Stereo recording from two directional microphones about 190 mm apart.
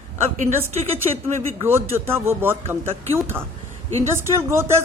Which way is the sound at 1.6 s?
15° right (ahead or behind).